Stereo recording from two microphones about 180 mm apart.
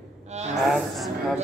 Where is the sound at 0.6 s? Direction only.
Centre (ahead or behind).